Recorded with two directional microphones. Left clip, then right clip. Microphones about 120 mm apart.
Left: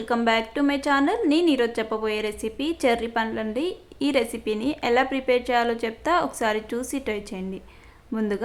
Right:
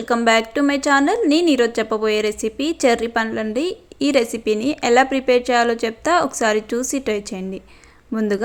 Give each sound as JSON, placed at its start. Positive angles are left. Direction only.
{"t": 0.3, "sound": "a woman's voice", "side_deg": -40}